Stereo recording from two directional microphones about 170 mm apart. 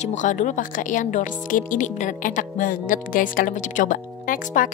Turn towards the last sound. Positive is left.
turn(degrees=55)  # may be behind; listen again after turning